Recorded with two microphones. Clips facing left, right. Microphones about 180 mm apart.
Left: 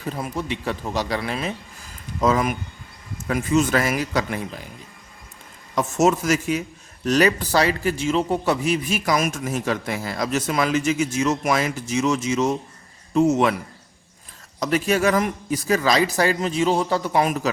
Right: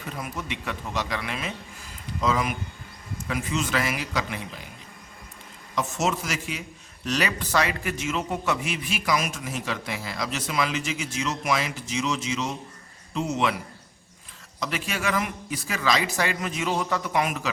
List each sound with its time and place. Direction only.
0.0 s a man's voice: 35° left (ahead or behind)
2.2 s a man's voice: 45° left (ahead or behind)
5.7 s a man's voice: 45° left (ahead or behind)
14.6 s a man's voice: 40° left (ahead or behind)